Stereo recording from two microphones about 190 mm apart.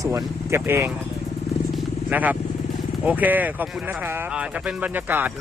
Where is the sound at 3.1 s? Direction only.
10° right (ahead or behind).